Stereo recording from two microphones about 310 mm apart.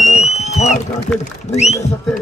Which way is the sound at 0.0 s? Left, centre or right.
Left.